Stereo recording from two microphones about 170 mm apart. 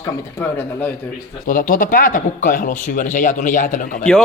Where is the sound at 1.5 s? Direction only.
50° left (ahead or behind).